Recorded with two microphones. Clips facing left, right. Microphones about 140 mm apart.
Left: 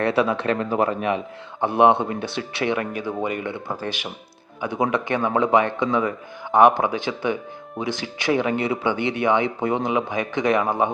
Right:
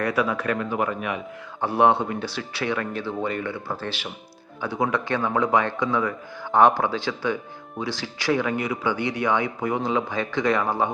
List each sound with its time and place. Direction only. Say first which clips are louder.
0.0 s speech: left 3 dB; 25° left (ahead or behind)
1.6 s speech: left 3 dB; 20° left (ahead or behind)